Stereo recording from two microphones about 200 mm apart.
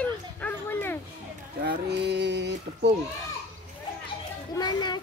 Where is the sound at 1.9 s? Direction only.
55° right (ahead or behind).